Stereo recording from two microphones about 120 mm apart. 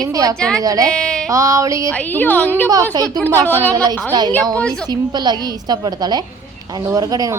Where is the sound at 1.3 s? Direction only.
25° right (ahead or behind).